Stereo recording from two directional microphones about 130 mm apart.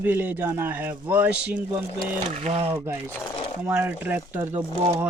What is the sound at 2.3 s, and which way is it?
Speech, 50° right (ahead or behind).